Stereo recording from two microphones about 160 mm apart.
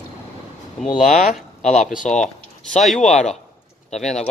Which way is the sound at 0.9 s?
50° left (ahead or behind).